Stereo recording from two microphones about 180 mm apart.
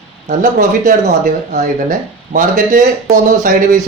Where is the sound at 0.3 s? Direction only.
50° right (ahead or behind).